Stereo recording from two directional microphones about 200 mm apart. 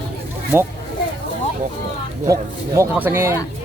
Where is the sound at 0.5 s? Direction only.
10° right (ahead or behind).